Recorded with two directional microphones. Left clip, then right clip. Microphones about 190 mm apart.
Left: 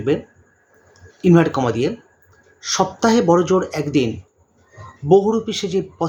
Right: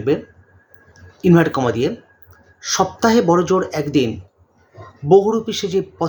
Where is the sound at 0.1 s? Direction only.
10° left (ahead or behind).